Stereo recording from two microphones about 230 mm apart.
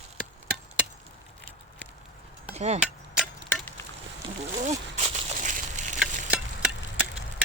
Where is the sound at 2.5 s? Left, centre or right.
Right.